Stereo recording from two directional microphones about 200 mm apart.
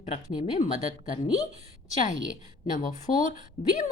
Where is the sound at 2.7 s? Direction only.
40° left (ahead or behind).